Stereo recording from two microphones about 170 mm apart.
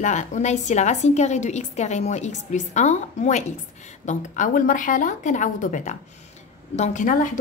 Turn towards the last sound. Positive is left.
turn(degrees=50)  # may be behind; listen again after turning